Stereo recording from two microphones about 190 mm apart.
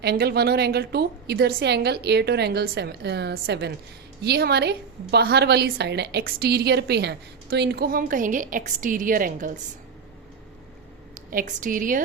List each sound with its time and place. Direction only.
0.0 s a woman's voice: 55° right (ahead or behind)
11.1 s a woman's voice: 45° right (ahead or behind)